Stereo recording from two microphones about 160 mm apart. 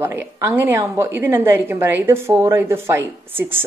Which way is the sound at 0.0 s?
15° right (ahead or behind).